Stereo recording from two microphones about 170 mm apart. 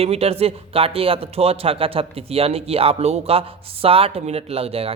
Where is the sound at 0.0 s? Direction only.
35° right (ahead or behind).